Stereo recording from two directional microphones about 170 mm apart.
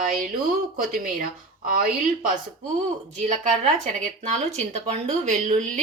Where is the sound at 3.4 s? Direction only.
45° right (ahead or behind).